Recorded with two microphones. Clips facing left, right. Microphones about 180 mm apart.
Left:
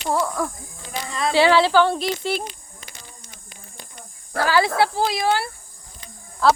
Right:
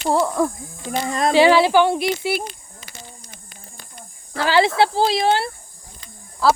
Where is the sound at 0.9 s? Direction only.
45° right (ahead or behind).